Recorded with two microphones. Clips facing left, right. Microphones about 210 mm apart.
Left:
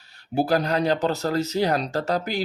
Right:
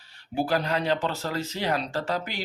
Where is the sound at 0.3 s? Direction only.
40° left (ahead or behind).